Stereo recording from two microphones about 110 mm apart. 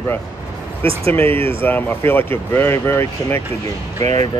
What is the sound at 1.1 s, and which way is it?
Speech, 20° left (ahead or behind).